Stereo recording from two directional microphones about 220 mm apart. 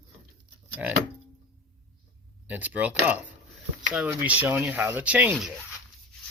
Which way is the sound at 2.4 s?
5° right (ahead or behind).